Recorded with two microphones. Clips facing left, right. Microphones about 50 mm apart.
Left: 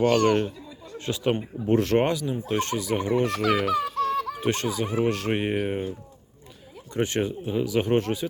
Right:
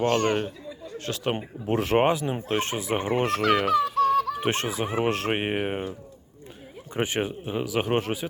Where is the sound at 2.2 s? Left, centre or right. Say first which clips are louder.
Even; right.